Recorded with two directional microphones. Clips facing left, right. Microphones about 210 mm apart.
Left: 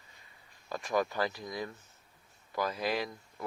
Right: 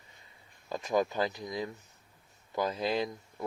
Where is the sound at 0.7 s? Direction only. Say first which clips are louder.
Right 2 dB; 20° right (ahead or behind).